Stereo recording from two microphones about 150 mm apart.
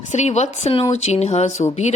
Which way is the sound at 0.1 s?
50° left (ahead or behind).